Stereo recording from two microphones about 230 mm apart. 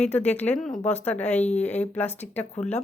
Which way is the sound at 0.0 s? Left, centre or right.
Centre.